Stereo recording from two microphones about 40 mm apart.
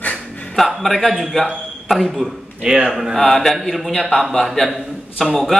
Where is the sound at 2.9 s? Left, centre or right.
Centre.